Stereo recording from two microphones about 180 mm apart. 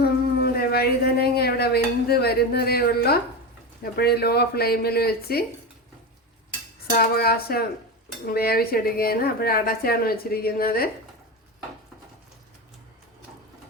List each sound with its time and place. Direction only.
0.0 s howl: 60° left (ahead or behind)
3.9 s a woman's voice: 60° left (ahead or behind)
6.9 s a woman's voice: 60° left (ahead or behind)